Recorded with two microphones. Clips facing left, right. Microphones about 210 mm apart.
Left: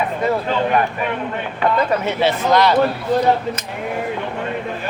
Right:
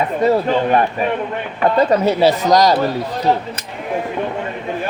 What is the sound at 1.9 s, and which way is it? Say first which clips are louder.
Speech: right 5 dB; 40° right (ahead or behind).